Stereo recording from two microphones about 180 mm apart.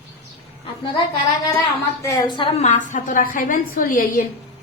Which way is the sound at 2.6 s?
45° left (ahead or behind).